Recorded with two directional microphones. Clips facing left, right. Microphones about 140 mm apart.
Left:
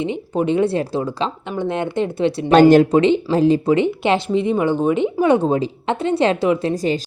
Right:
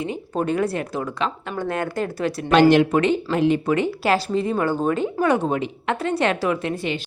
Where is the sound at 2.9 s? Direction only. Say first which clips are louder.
Left 5 dB; 25° left (ahead or behind).